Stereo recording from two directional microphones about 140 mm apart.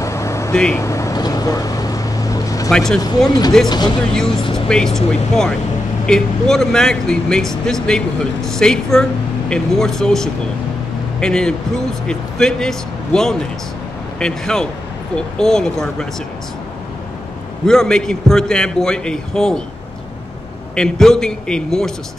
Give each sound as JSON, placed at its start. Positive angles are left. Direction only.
{"t": 0.0, "sound": "vehicle", "side_deg": 20}
{"t": 2.7, "sound": "speech", "side_deg": 5}
{"t": 3.3, "sound": "speech", "side_deg": 30}
{"t": 4.6, "sound": "speech", "side_deg": 5}
{"t": 17.6, "sound": "speech", "side_deg": 5}
{"t": 20.7, "sound": "speech", "side_deg": 5}